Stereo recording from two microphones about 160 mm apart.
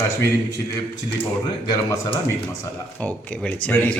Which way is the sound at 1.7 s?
20° left (ahead or behind).